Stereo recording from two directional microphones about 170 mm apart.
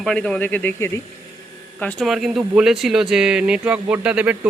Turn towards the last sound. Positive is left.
turn(degrees=-10)  # may be behind; listen again after turning